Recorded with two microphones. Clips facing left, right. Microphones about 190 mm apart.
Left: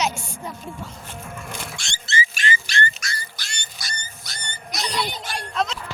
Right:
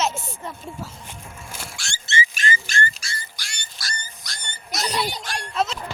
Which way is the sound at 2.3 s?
40° right (ahead or behind).